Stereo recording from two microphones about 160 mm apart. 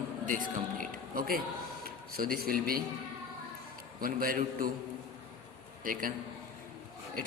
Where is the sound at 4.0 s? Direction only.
65° right (ahead or behind).